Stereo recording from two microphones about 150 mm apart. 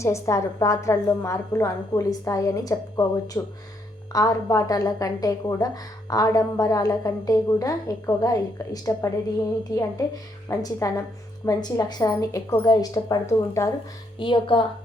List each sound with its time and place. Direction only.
0.0 s a woman's voice: 20° left (ahead or behind)
14.2 s speech: 35° left (ahead or behind)